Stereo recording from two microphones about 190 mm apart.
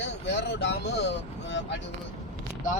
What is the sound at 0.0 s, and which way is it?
Speech, 65° left (ahead or behind).